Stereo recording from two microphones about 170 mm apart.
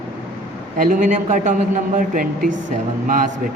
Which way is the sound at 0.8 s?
50° right (ahead or behind).